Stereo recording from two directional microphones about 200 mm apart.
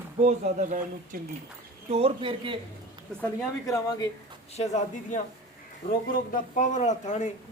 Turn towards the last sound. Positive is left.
turn(degrees=35)  # may be behind; listen again after turning